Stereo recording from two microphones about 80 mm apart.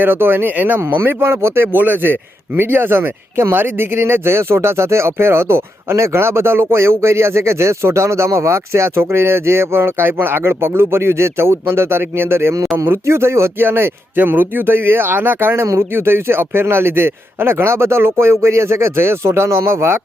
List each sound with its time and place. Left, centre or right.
0.0 s speech: right